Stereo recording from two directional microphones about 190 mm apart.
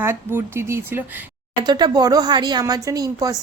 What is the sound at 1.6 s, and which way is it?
Speech, 20° right (ahead or behind).